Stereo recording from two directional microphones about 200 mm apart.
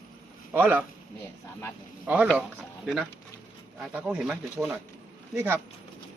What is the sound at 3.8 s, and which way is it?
Speech, 5° right (ahead or behind).